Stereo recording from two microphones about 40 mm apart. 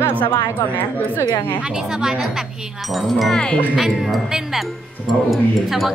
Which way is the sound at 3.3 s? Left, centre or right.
Left.